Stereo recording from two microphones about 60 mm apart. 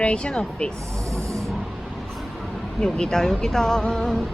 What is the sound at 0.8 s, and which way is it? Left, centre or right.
Snake, centre.